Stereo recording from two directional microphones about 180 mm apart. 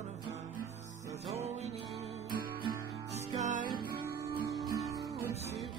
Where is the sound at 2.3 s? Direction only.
55° right (ahead or behind).